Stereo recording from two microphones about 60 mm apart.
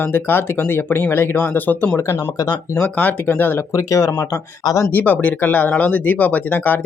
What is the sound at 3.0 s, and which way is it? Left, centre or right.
Speech, left.